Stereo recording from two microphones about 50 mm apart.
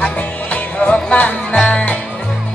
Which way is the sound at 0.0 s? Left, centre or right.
Left.